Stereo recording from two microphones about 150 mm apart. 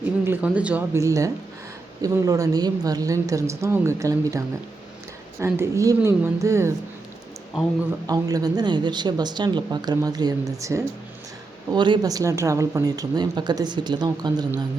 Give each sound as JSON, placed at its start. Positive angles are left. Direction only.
{"t": 0.0, "sound": "speech", "side_deg": -10}
{"t": 0.9, "sound": "speech", "side_deg": -20}
{"t": 8.0, "sound": "speech", "side_deg": -25}